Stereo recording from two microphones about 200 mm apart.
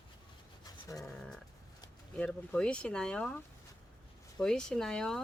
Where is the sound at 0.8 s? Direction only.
15° left (ahead or behind).